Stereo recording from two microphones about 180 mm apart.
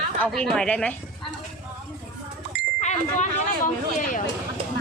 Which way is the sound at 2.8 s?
40° left (ahead or behind).